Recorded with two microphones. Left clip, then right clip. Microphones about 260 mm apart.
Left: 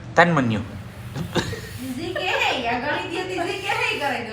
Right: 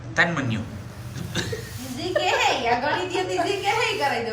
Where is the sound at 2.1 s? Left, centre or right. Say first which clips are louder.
Right 4 dB; right.